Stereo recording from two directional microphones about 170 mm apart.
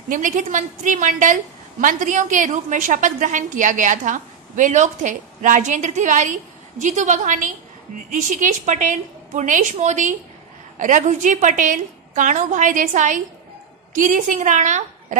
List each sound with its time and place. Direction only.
0.1 s a woman's voice: 50° right (ahead or behind)